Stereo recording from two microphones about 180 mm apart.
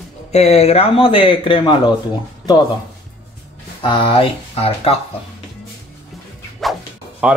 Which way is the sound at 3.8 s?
25° left (ahead or behind).